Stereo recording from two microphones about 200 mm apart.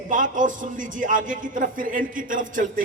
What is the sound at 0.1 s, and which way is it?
A man's voice, 40° right (ahead or behind).